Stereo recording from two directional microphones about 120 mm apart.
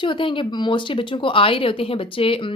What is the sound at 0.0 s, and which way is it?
A woman's voice, 45° left (ahead or behind).